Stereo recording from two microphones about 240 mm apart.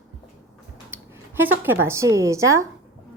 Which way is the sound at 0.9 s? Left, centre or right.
Centre.